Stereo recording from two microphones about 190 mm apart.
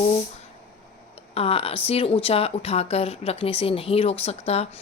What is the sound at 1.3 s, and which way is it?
Speech, 30° left (ahead or behind).